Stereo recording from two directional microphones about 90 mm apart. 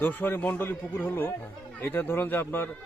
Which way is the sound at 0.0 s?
20° left (ahead or behind).